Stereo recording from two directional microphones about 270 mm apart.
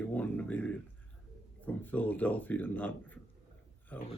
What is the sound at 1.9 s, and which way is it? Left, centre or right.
Speech, centre.